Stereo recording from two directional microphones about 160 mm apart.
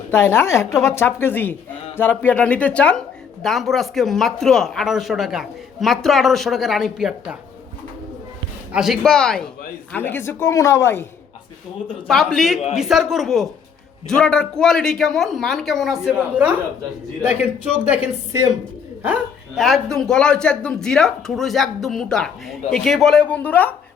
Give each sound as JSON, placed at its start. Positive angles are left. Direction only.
{"t": 0.1, "sound": "speech", "side_deg": 15}
{"t": 8.7, "sound": "speech", "side_deg": 0}
{"t": 12.0, "sound": "speech", "side_deg": 0}
{"t": 17.8, "sound": "speech", "side_deg": -15}